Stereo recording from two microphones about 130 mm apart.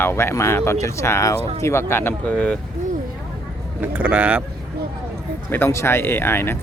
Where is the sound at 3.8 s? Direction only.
10° right (ahead or behind).